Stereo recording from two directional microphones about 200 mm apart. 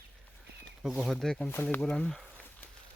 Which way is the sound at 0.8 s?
Centre (ahead or behind).